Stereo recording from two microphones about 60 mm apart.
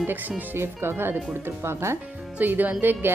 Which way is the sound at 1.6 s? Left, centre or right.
Right.